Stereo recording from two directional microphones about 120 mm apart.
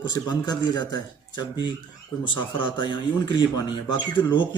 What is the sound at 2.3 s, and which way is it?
Speech, 40° left (ahead or behind).